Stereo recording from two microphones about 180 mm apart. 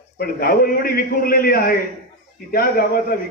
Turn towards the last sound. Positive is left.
turn(degrees=55)  # may be behind; listen again after turning